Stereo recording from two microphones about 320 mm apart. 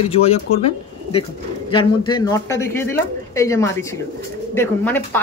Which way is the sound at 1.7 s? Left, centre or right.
Centre.